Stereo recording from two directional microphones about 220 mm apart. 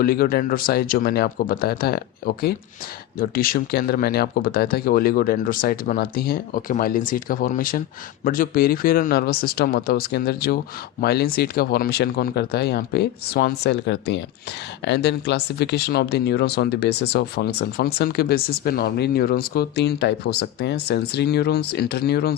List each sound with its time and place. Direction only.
0.0 s speech: 40° left (ahead or behind)